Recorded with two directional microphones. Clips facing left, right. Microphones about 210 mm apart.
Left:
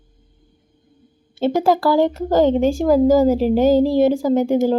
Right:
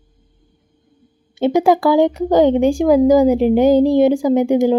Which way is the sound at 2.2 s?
15° right (ahead or behind).